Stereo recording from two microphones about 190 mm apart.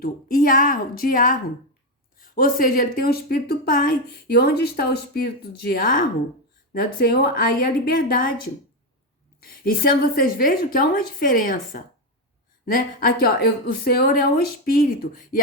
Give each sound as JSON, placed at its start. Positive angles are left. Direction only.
{"t": 0.0, "sound": "speech", "side_deg": 50}
{"t": 9.4, "sound": "speech", "side_deg": 50}